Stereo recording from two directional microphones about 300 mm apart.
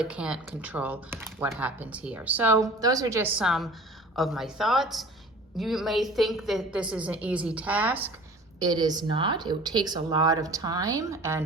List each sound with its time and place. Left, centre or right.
0.0 s speech: centre